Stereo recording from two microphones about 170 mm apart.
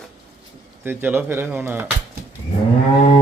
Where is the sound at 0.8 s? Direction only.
10° right (ahead or behind).